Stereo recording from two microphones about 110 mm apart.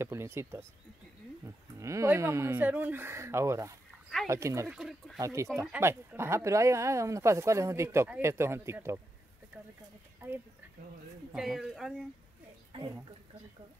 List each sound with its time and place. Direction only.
0.0 s speech: 25° right (ahead or behind)
4.6 s speech: 5° right (ahead or behind)
5.2 s speech: 30° right (ahead or behind)
10.2 s speech: 25° right (ahead or behind)
11.3 s speech: 5° right (ahead or behind)
12.7 s speech: 55° right (ahead or behind)